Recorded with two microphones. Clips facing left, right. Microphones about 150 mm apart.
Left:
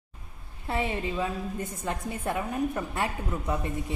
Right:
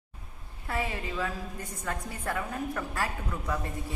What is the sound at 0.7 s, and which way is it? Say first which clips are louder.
A woman's voice: left 4 dB; 25° left (ahead or behind).